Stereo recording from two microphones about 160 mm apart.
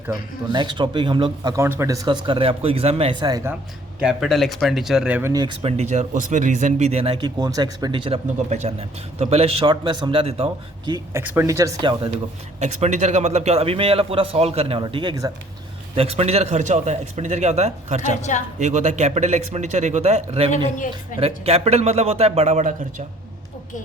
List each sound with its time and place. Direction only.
0.1 s speech: 30° right (ahead or behind)
1.5 s speech: 15° right (ahead or behind)
4.0 s speech: centre (ahead or behind)
5.3 s speech: 25° right (ahead or behind)
5.6 s speech: 45° right (ahead or behind)
10.8 s speech: 25° right (ahead or behind)
11.2 s speech: 10° right (ahead or behind); by 12.1 s 30° right (ahead or behind)
12.5 s speech: 45° right (ahead or behind); by 15.3 s 25° right (ahead or behind)
16.0 s a man's voice: 40° right (ahead or behind)
18.1 s a woman's voice: 50° left (ahead or behind)
18.6 s a man's voice: 45° right (ahead or behind)
20.7 s a woman's voice: 55° left (ahead or behind)
21.2 s speech: 40° right (ahead or behind)